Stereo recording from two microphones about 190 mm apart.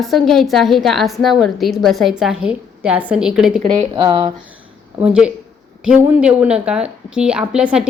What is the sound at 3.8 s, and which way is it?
Speech, 30° right (ahead or behind).